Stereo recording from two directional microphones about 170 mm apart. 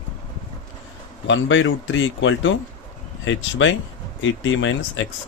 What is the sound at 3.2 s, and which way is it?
Speech, 90° left.